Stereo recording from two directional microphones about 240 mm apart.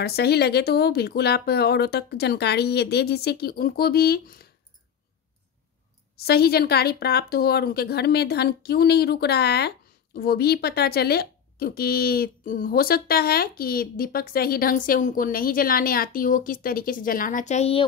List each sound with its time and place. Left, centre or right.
0.0 s speech: left
6.1 s speech: left